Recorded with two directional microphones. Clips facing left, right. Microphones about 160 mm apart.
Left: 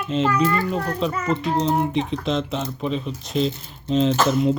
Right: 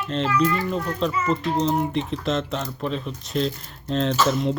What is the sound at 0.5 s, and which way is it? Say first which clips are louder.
Speech: left 2 dB; 45° left (ahead or behind).